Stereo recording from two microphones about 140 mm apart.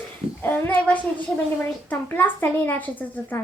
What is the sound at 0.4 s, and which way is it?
A woman's voice, 15° left (ahead or behind).